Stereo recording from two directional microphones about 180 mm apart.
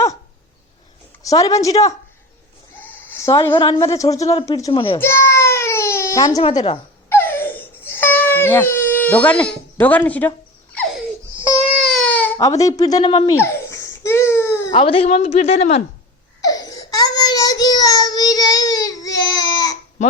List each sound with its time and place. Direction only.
1.2 s a woman's voice: 20° left (ahead or behind)
2.8 s bleat: 10° left (ahead or behind)
3.5 s a woman's voice: 30° left (ahead or behind)
3.8 s speech: 15° left (ahead or behind)
4.7 s a woman's voice: 30° left (ahead or behind)
4.9 s baby cry: 15° left (ahead or behind)
6.4 s music: 25° left (ahead or behind); by 9.5 s 5° left (ahead or behind)
9.8 s speech: 10° left (ahead or behind)
10.8 s laughter: centre (ahead or behind)
11.6 s baby cry: centre (ahead or behind); by 13.3 s 25° left (ahead or behind)
13.3 s babbling: 15° left (ahead or behind)
14.7 s a woman's voice: 30° left (ahead or behind)
16.4 s baby cry: 20° left (ahead or behind)